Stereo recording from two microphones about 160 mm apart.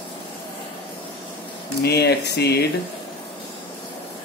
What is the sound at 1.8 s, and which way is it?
Speech, 90° left.